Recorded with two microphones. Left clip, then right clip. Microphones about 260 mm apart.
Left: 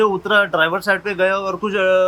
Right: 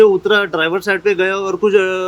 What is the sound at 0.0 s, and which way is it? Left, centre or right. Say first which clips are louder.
Speech: right 4 dB; centre.